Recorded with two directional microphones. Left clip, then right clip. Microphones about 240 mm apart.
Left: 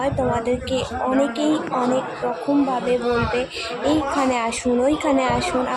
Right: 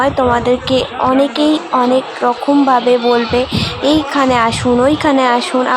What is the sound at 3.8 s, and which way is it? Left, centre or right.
A woman's voice, centre.